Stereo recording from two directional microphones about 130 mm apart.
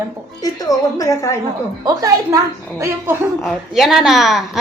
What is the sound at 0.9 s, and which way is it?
Speech, 25° left (ahead or behind).